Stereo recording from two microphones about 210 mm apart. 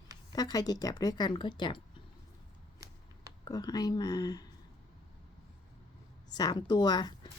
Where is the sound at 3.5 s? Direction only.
20° left (ahead or behind).